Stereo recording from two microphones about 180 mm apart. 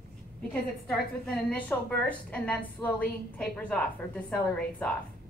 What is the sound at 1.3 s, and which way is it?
A woman's voice, 5° left (ahead or behind).